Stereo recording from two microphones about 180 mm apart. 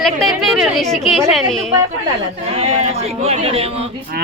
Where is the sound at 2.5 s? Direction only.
35° right (ahead or behind).